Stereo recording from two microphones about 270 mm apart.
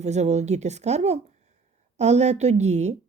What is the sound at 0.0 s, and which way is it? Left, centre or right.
A woman's voice, right.